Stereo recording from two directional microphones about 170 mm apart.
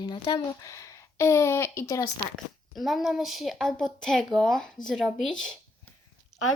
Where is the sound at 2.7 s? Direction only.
Centre (ahead or behind).